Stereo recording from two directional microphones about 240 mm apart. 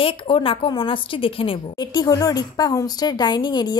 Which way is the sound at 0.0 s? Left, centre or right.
Left.